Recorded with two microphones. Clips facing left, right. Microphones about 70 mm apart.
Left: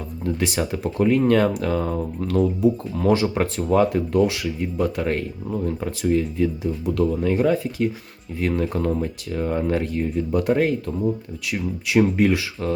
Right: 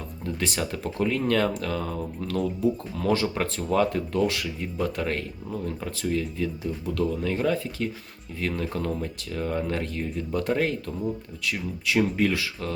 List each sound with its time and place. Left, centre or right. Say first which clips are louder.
0.3 s speech: left 6 dB; centre
0.6 s speech: left 6 dB; left
4.2 s speech: left 4 dB; centre; by 12.7 s left